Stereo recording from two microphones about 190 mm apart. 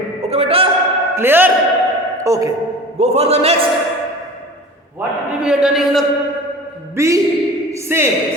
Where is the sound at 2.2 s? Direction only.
20° right (ahead or behind).